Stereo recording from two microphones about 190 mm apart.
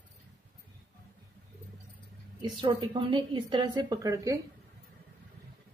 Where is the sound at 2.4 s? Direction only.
25° right (ahead or behind).